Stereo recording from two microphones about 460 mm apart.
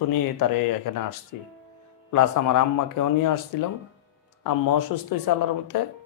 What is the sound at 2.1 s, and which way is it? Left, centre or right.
Speech, left.